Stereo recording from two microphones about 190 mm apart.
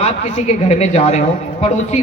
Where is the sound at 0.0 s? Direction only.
35° left (ahead or behind).